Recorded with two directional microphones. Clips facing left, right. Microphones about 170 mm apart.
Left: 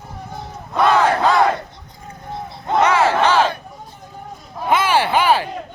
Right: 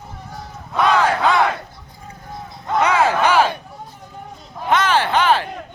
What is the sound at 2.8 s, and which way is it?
Battle cry, 15° right (ahead or behind).